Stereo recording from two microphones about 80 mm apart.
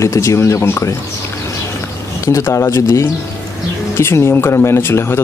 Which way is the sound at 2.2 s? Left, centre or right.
Left.